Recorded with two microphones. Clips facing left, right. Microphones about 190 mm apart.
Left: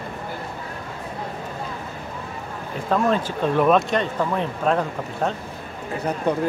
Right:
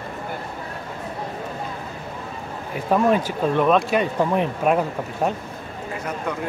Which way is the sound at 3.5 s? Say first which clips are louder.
Left 1 dB; centre (ahead or behind).